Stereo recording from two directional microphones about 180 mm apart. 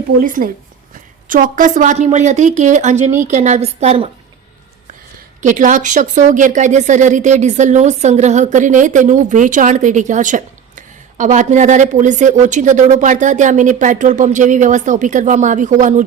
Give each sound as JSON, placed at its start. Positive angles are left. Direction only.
{"t": 0.2, "sound": "a woman's voice", "side_deg": -50}
{"t": 5.4, "sound": "speech", "side_deg": -45}